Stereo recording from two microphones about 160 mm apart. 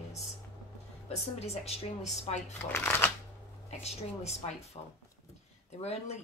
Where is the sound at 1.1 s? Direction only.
40° left (ahead or behind).